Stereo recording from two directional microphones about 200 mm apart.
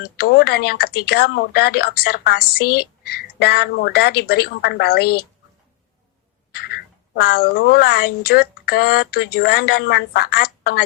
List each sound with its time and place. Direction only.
0.0 s speech: 50° left (ahead or behind)
6.6 s speech: 50° left (ahead or behind)